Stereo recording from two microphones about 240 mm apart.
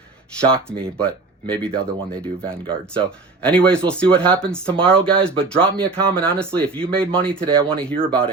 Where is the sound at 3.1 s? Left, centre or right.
Centre.